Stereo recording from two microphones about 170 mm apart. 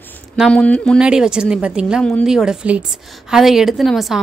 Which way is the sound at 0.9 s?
5° right (ahead or behind).